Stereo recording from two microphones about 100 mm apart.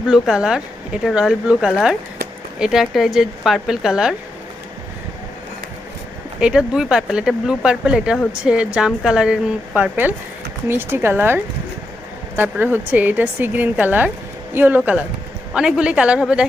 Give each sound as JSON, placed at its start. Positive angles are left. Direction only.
{"t": 0.1, "sound": "speech", "side_deg": -5}
{"t": 6.4, "sound": "speech", "side_deg": -5}
{"t": 12.4, "sound": "speech", "side_deg": -20}